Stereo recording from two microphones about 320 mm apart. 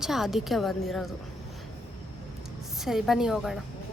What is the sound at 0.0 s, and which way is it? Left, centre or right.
A woman's voice, centre.